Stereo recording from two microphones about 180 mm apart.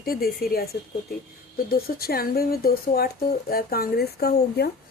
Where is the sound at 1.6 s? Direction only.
55° left (ahead or behind).